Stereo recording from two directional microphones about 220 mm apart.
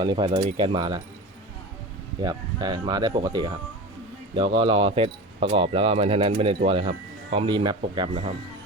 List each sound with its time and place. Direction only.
0.0 s speech: 20° right (ahead or behind)
0.3 s speech: 30° right (ahead or behind)
0.5 s speech: 20° right (ahead or behind)
2.2 s speech: 20° right (ahead or behind)